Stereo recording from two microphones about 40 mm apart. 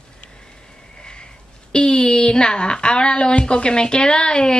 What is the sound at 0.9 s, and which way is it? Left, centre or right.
Speech, left.